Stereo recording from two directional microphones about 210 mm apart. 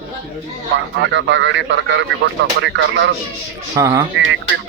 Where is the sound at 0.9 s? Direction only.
60° right (ahead or behind).